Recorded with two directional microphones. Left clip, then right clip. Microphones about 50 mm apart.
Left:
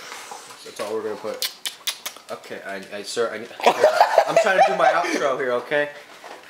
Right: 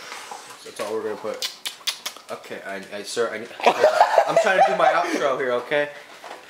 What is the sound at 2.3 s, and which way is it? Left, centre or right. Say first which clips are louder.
Speech: left 1 dB; centre.